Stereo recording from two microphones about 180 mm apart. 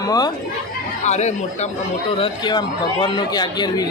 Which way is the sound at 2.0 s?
25° left (ahead or behind).